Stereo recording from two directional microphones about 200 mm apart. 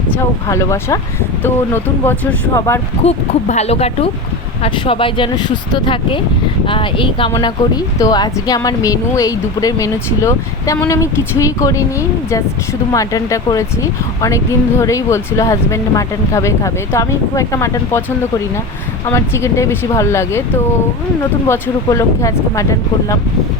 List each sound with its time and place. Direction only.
0.4 s speech: 15° left (ahead or behind)
3.0 s speech: 35° left (ahead or behind); by 20.4 s 15° left (ahead or behind)
21.4 s speech: 15° left (ahead or behind)